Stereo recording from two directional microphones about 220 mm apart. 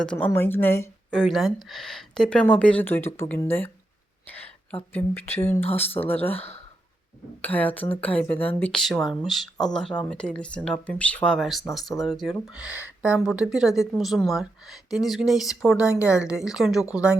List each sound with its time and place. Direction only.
0.0 s a woman's voice: 5° left (ahead or behind)
7.4 s a woman's voice: 5° left (ahead or behind)